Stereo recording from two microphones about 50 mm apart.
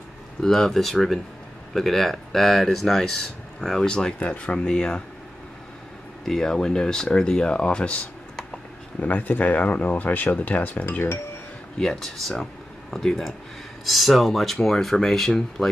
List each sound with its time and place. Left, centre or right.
0.4 s speech: centre
6.2 s speech: centre
9.0 s speech: left
11.8 s speech: centre